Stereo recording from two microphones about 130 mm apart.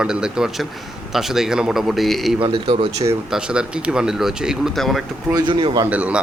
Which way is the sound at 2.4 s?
40° right (ahead or behind).